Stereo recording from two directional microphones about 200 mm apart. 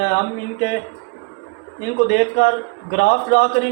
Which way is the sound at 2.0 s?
55° left (ahead or behind).